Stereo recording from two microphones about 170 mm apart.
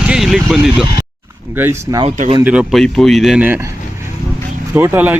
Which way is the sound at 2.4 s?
5° right (ahead or behind).